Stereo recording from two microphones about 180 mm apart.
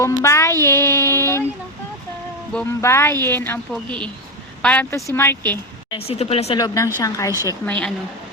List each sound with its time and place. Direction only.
0.0 s a sound: 15° left (ahead or behind)
2.6 s a woman's voice: 15° left (ahead or behind)
6.1 s speech: 35° left (ahead or behind)
6.6 s a woman's voice: 20° left (ahead or behind)
7.6 s a woman's voice: 5° left (ahead or behind)